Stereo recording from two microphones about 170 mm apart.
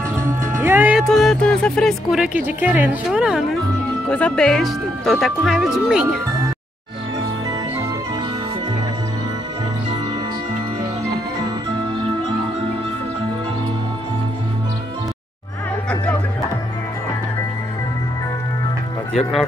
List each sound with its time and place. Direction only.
0.1 s music: 10° right (ahead or behind)
1.0 s speech: centre (ahead or behind)
11.7 s music: 30° right (ahead or behind)